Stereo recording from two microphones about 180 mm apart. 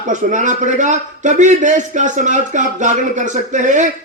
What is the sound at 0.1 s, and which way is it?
A man's voice, 45° right (ahead or behind).